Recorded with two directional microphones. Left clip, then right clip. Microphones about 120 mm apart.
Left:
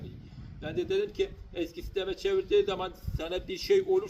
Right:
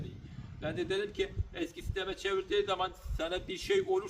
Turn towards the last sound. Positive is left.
turn(degrees=-40)  # may be behind; listen again after turning